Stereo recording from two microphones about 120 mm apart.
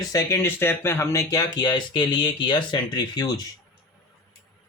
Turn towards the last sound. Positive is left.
turn(degrees=35)  # may be behind; listen again after turning